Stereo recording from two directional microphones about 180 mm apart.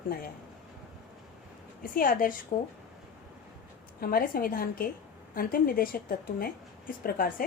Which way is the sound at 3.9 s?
55° left (ahead or behind).